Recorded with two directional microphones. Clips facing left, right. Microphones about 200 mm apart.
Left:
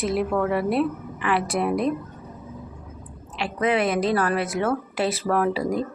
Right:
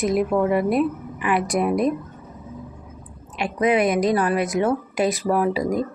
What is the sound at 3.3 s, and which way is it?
A woman's voice, 15° right (ahead or behind).